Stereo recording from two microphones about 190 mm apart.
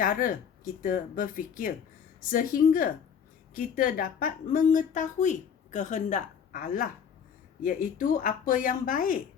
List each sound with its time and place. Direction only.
0.0 s speech: 45° left (ahead or behind)